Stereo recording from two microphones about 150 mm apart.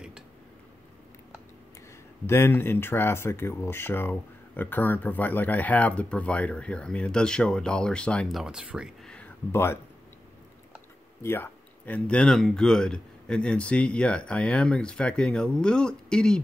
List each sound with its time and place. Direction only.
2.2 s speech: 15° left (ahead or behind); by 9.1 s 5° right (ahead or behind)
9.1 s a sound: 10° left (ahead or behind)
11.2 s speech: 15° left (ahead or behind)